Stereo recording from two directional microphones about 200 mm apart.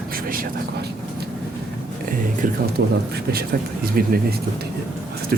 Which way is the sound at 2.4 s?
45° right (ahead or behind).